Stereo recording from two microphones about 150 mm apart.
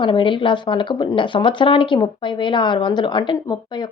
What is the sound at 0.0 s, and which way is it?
Speech, 35° left (ahead or behind).